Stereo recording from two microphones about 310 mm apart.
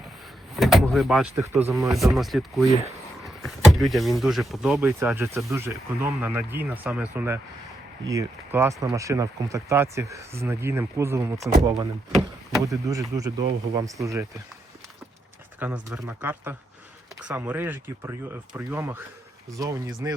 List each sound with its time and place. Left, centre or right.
0.5 s speech: centre
2.6 s speech: centre
3.2 s speech: centre
12.6 s speech: centre
15.5 s speech: centre